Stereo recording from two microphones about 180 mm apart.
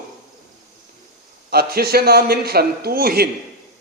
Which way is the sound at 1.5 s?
60° right (ahead or behind).